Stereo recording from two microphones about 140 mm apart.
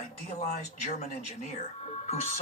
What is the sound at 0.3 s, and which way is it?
Speech, 55° left (ahead or behind).